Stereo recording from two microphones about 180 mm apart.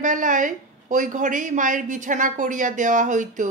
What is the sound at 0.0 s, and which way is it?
Speech, 45° right (ahead or behind).